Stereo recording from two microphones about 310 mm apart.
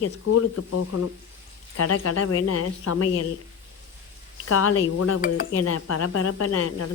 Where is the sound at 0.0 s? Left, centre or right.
Left.